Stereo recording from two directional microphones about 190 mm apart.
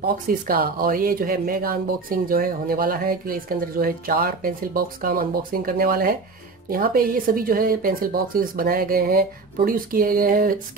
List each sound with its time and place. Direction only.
0.3 s speech: 50° right (ahead or behind)